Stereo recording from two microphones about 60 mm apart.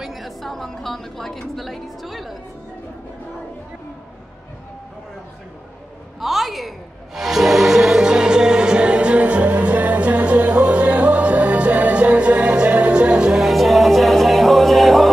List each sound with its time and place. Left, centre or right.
0.0 s a woman's voice: centre
6.2 s a woman's voice: centre
7.2 s music: centre
13.4 s music: centre